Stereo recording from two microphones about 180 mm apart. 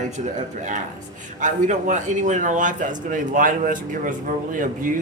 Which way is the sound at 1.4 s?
45° right (ahead or behind).